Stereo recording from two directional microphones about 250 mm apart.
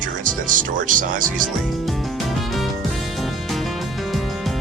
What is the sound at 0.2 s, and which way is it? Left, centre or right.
Speech, right.